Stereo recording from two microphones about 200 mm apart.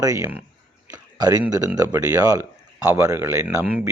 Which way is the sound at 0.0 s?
15° right (ahead or behind).